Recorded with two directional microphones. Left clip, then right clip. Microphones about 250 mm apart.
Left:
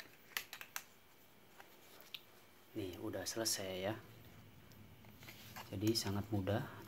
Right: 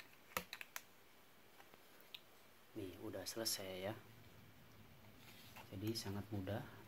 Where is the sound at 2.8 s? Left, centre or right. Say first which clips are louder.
Left 5 dB; centre.